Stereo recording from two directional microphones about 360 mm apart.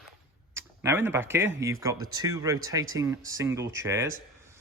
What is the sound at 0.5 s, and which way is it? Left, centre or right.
Speech, centre.